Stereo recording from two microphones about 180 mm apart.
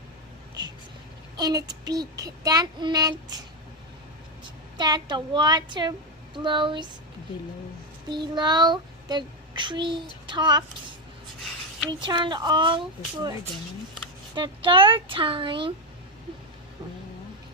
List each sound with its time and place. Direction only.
0.6 s a sound: 25° right (ahead or behind)
1.4 s child singing: 20° right (ahead or behind)
4.4 s a woman's voice: 25° right (ahead or behind)
6.3 s child singing: 25° right (ahead or behind)
8.1 s child singing: 25° right (ahead or behind)
11.9 s child singing: 25° right (ahead or behind)
14.3 s child singing: 25° right (ahead or behind)